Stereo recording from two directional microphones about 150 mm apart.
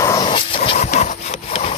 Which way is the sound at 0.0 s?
20° left (ahead or behind).